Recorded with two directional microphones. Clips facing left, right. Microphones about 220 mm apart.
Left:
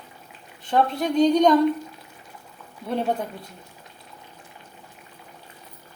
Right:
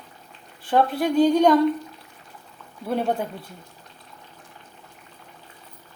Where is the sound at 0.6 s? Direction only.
5° right (ahead or behind).